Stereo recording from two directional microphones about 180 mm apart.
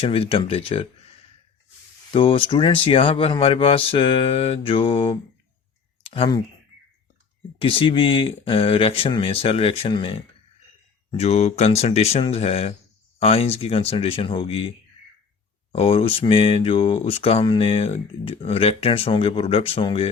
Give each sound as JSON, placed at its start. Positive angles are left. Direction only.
{"t": 0.0, "sound": "speech", "side_deg": 30}
{"t": 2.0, "sound": "speech", "side_deg": 30}
{"t": 6.0, "sound": "clicking", "side_deg": 30}
{"t": 7.6, "sound": "speech", "side_deg": 30}
{"t": 15.7, "sound": "speech", "side_deg": 35}